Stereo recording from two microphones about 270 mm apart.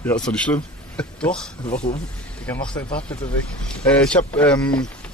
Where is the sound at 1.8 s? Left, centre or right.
Left.